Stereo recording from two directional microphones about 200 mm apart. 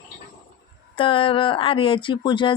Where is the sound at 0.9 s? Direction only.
25° left (ahead or behind).